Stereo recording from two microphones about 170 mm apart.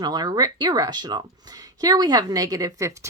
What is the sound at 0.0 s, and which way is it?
Speech, 25° right (ahead or behind).